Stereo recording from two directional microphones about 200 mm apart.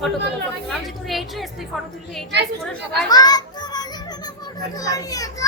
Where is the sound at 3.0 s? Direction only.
20° left (ahead or behind).